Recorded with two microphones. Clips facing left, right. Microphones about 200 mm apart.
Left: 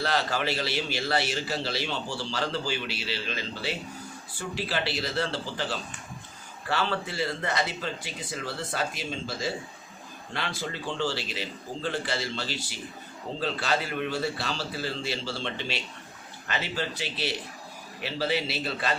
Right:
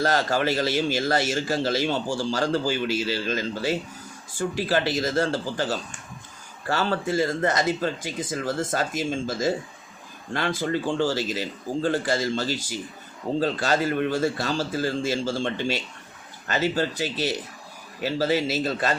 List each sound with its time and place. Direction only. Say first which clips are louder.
0.0 s a man's voice: right 5 dB; 45° right (ahead or behind)